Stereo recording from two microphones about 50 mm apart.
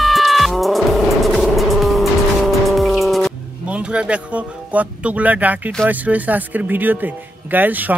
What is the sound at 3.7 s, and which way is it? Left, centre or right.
Speech, right.